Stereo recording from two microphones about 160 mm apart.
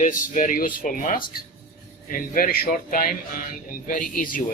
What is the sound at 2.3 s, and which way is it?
Speech, 65° left (ahead or behind).